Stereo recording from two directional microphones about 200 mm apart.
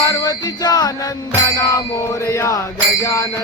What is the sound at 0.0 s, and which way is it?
Music, 20° left (ahead or behind).